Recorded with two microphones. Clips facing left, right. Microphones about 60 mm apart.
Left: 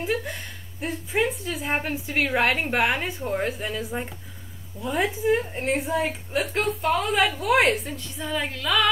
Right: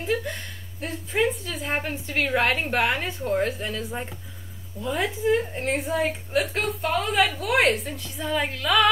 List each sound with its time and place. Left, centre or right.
0.7 s a woman's voice: centre